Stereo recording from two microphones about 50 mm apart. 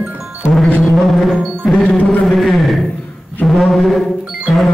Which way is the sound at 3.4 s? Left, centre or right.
Centre.